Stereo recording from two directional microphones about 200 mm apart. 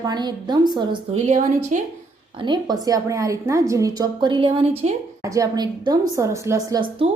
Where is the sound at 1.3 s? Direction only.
35° right (ahead or behind).